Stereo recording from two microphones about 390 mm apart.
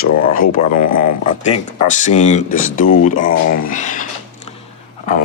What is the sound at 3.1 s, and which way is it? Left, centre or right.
Speech, left.